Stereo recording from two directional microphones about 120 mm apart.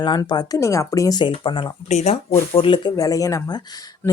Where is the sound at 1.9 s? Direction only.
70° left (ahead or behind); by 2.9 s 45° left (ahead or behind).